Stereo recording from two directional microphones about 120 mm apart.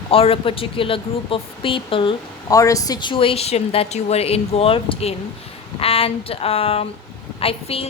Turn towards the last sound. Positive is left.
turn(degrees=55)  # may be behind; listen again after turning